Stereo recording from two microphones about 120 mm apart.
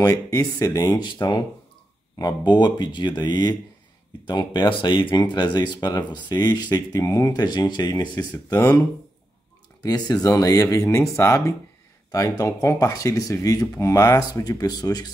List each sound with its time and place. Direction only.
0.0 s speech: 30° left (ahead or behind)
9.8 s speech: 35° left (ahead or behind)